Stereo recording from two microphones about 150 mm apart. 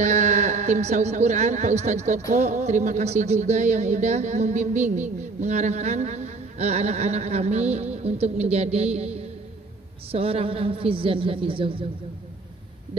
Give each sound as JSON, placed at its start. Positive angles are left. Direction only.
{"t": 0.0, "sound": "a woman's voice", "side_deg": -50}